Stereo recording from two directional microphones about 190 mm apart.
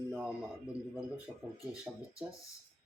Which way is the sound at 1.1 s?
20° left (ahead or behind).